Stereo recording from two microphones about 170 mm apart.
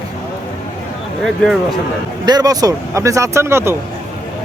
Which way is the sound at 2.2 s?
25° right (ahead or behind).